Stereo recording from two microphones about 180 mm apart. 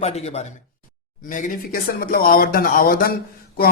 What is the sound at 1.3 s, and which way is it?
Speech, 45° left (ahead or behind).